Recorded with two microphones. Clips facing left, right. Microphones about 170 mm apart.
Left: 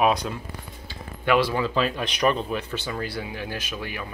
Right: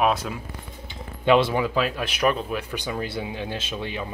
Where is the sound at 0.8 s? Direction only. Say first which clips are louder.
Right 4 dB; 20° right (ahead or behind).